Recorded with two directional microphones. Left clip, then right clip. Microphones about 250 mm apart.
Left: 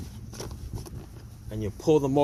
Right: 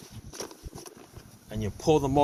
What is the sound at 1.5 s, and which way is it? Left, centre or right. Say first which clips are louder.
Speech: left 1 dB; left.